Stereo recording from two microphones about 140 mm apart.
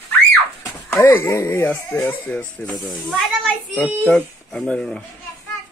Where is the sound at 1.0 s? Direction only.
20° left (ahead or behind).